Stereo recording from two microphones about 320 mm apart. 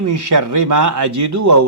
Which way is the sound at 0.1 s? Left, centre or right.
Right.